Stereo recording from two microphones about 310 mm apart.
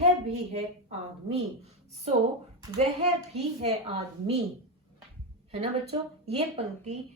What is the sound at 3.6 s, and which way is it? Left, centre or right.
Speech, centre.